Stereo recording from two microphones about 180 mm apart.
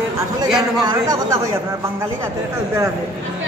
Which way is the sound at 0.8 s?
20° right (ahead or behind).